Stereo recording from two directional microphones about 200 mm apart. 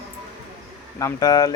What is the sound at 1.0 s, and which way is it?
Speech, 20° left (ahead or behind).